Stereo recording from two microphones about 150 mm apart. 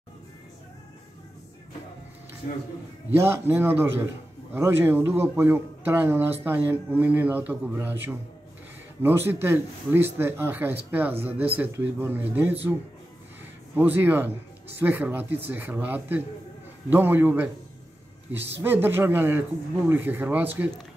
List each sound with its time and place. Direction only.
3.1 s speech: 15° right (ahead or behind)
13.7 s speech: 15° right (ahead or behind)
18.6 s speech: 15° right (ahead or behind)